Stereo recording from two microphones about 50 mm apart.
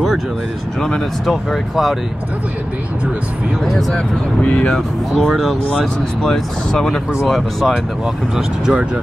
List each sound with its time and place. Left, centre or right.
0.7 s speech: centre
1.3 s speech: centre
4.4 s speech: left; by 7.7 s centre
8.4 s speech: centre